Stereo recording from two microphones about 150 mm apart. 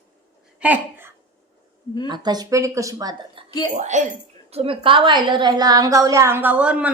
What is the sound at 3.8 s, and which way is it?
Speech, 55° right (ahead or behind).